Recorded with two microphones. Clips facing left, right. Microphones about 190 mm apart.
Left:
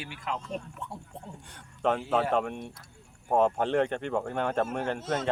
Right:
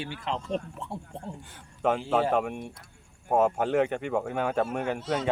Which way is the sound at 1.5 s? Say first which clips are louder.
Right 1 dB; 5° right (ahead or behind).